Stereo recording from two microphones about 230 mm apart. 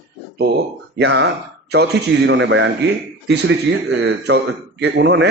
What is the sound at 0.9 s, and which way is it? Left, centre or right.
Speech, right.